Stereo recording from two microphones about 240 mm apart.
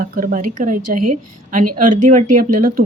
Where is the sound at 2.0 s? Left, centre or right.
Right.